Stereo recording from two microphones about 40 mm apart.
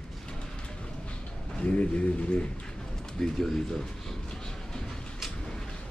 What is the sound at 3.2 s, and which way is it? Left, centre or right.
Speech, centre.